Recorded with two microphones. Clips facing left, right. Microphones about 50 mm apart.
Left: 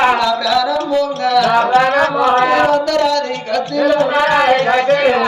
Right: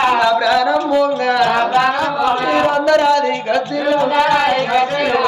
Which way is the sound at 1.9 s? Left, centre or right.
Left.